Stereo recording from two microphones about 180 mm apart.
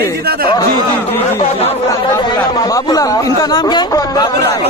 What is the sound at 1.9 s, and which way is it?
Speech, 20° left (ahead or behind).